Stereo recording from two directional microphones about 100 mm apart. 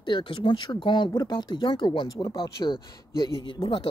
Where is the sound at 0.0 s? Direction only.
55° left (ahead or behind).